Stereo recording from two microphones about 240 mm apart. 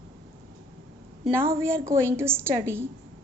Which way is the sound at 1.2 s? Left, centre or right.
Centre.